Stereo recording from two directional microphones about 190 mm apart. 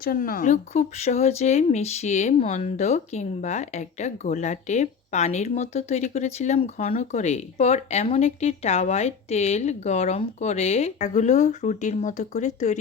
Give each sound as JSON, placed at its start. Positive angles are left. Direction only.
{"t": 0.0, "sound": "speech", "side_deg": 50}